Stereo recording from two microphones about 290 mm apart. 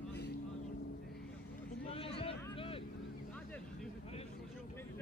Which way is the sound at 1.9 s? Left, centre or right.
Centre.